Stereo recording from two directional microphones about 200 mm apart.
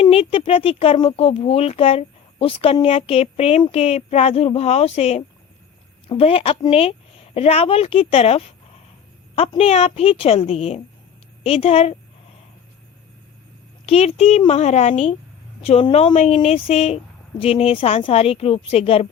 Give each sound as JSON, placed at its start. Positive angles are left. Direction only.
{"t": 0.0, "sound": "speech", "side_deg": 30}
{"t": 13.8, "sound": "speech", "side_deg": 30}